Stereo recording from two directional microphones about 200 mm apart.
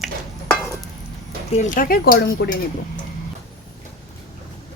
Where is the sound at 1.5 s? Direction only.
40° left (ahead or behind).